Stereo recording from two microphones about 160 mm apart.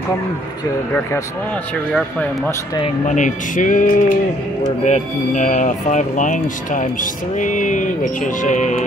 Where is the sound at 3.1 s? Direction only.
50° left (ahead or behind).